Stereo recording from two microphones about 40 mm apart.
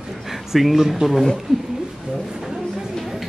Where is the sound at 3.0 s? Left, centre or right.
Centre.